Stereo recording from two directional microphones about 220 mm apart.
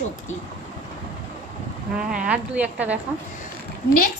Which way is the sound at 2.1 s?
5° right (ahead or behind).